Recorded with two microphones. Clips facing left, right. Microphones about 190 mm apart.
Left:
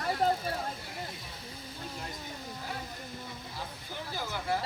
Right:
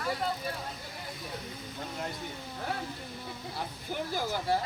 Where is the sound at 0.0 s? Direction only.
45° left (ahead or behind).